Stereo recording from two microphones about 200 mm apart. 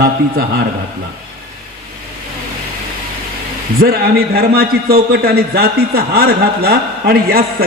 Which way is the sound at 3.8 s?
50° right (ahead or behind).